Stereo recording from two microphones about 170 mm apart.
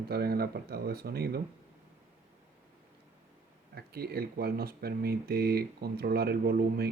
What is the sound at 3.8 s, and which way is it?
Speech, 65° right (ahead or behind).